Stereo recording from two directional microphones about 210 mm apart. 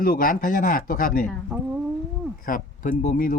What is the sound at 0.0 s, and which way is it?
Speech, 45° left (ahead or behind).